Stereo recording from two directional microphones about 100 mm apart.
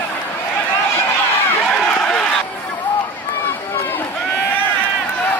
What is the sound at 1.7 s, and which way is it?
Run, 10° left (ahead or behind).